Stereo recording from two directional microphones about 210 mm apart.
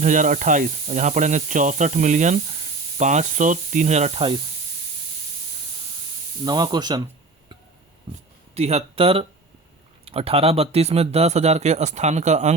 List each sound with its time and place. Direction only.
0.0 s speech: 35° right (ahead or behind)
6.4 s speech: 20° right (ahead or behind)
8.5 s speech: 30° right (ahead or behind)